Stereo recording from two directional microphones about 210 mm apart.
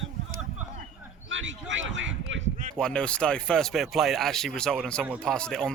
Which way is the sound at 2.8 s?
5° left (ahead or behind).